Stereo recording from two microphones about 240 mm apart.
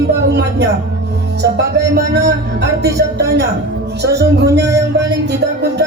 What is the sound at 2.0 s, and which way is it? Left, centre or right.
A woman's voice, right.